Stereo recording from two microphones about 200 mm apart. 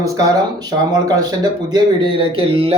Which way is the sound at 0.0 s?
15° right (ahead or behind).